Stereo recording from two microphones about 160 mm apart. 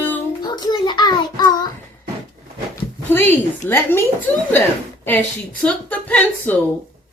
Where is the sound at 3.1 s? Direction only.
10° left (ahead or behind).